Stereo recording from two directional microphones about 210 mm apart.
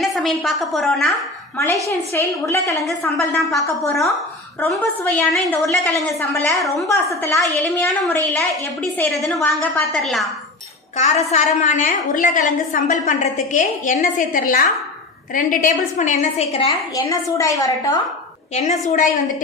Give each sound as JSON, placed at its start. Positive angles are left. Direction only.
{"t": 0.0, "sound": "a woman's voice", "side_deg": 0}
{"t": 1.9, "sound": "a woman's voice", "side_deg": 15}
{"t": 3.3, "sound": "a woman's voice", "side_deg": 0}
{"t": 6.1, "sound": "a woman's voice", "side_deg": 15}
{"t": 7.8, "sound": "a woman's voice", "side_deg": 0}
{"t": 10.9, "sound": "a woman's voice", "side_deg": 35}
{"t": 16.6, "sound": "a woman's voice", "side_deg": 15}
{"t": 18.9, "sound": "a woman's voice", "side_deg": 40}